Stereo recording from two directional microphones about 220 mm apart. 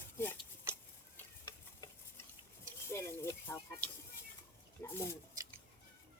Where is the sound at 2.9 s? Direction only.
10° left (ahead or behind).